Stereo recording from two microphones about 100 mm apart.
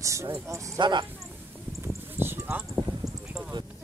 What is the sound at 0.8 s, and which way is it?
Speech, 50° right (ahead or behind).